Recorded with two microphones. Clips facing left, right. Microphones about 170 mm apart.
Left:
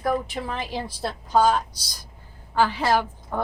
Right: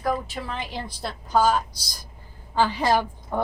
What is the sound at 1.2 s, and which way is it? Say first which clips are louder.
Speech: left 1 dB; 5° right (ahead or behind).